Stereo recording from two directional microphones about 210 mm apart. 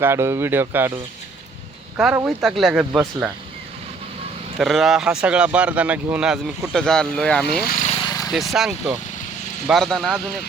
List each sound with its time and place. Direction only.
0.0 s speech: 10° right (ahead or behind)
2.0 s speech: 10° right (ahead or behind)
4.5 s speech: centre (ahead or behind)
7.6 s speech: 40° left (ahead or behind)
7.9 s vehicle: 20° left (ahead or behind)
8.3 s speech: centre (ahead or behind)